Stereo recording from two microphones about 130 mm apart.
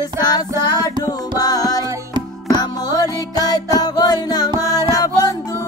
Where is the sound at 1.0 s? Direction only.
30° left (ahead or behind).